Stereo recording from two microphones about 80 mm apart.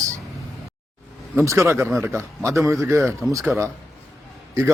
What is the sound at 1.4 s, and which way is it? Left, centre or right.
A man's voice, right.